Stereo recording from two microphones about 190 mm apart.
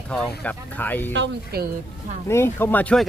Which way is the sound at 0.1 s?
5° left (ahead or behind).